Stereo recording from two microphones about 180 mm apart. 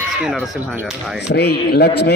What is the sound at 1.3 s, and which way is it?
Speech, 65° left (ahead or behind).